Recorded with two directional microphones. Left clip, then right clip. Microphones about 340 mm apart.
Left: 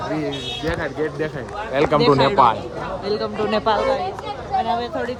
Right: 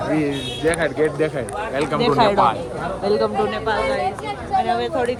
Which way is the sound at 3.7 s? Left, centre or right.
Left.